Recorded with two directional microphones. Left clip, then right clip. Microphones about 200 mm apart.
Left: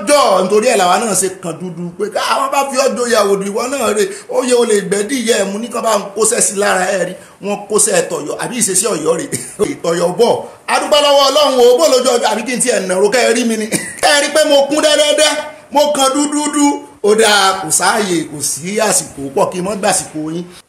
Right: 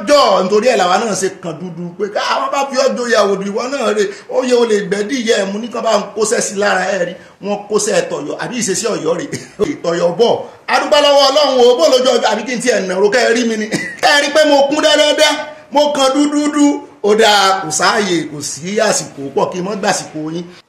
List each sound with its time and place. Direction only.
0.0 s speech: 15° left (ahead or behind)